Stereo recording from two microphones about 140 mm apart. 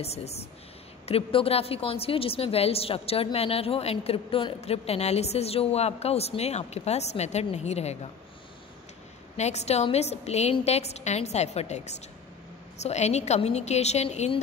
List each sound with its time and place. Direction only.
0.0 s a woman's voice: 50° left (ahead or behind)
9.4 s a woman's voice: 55° left (ahead or behind)